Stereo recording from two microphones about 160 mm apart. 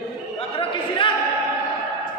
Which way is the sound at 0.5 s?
30° left (ahead or behind).